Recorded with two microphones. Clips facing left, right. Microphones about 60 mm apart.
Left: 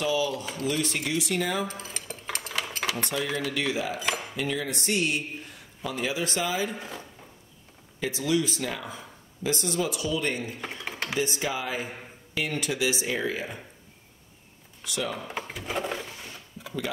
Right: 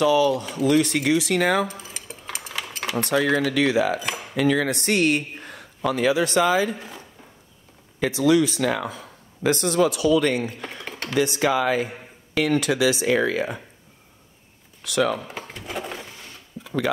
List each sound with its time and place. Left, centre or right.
0.0 s speech: right
1.7 s dishes: centre
2.3 s a sound: centre
3.1 s speech: right
8.0 s speech: right
10.9 s typing: centre
11.1 s speech: right
14.9 s speech: right
15.2 s sewing machine: centre